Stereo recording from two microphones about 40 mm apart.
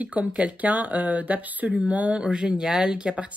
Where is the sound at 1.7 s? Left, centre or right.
Right.